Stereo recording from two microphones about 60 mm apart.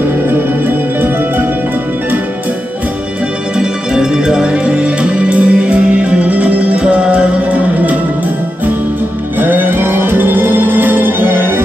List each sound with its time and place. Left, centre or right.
3.5 s music: centre
9.4 s music: right